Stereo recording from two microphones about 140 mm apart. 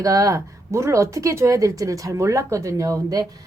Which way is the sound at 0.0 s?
25° right (ahead or behind).